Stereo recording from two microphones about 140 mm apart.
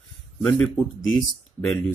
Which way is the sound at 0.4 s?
10° left (ahead or behind).